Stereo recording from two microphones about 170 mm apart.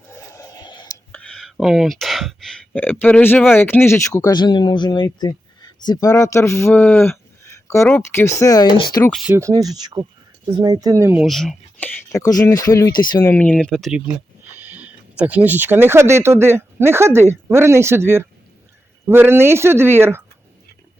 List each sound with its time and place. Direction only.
0.1 s a sound: 20° left (ahead or behind)
1.1 s speech: 5° left (ahead or behind); by 8.7 s 20° left (ahead or behind)
9.2 s speech: 15° right (ahead or behind)
11.2 s speech: centre (ahead or behind)
12.1 s speech: 20° left (ahead or behind)
13.3 s speech: 10° left (ahead or behind); by 20.2 s 15° right (ahead or behind)